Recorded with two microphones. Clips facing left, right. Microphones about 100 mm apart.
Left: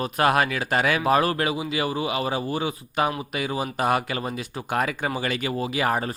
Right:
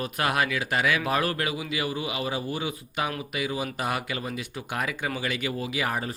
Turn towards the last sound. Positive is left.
turn(degrees=45)  # may be behind; listen again after turning